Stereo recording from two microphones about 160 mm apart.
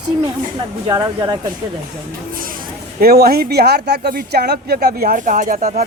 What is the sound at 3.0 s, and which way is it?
Speech, 70° right (ahead or behind).